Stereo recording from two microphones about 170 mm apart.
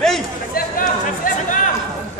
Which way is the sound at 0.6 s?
55° left (ahead or behind).